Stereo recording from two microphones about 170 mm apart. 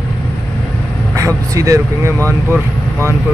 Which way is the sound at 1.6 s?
20° right (ahead or behind).